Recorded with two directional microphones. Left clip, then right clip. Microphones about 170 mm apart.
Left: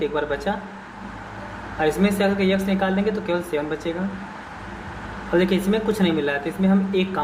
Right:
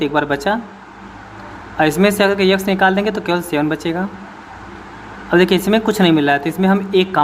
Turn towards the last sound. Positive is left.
turn(degrees=-60)  # may be behind; listen again after turning